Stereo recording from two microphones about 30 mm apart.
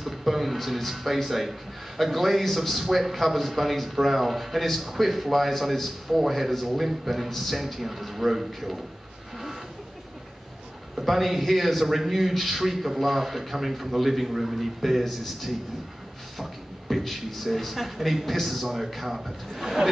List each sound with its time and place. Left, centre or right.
0.0 s a man's voice: centre
11.0 s a man's voice: centre
16.3 s beatboxing: centre
17.0 s a man's voice: centre